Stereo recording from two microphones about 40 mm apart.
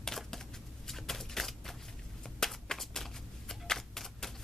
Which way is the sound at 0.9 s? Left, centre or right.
Centre.